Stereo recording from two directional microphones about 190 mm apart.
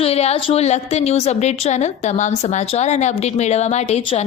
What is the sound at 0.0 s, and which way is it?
A woman's voice, 35° left (ahead or behind).